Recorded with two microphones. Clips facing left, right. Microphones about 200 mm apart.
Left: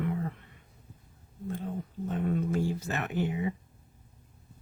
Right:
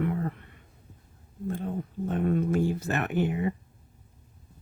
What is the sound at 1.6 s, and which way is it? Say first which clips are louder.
Speech: right 4 dB; 55° right (ahead or behind).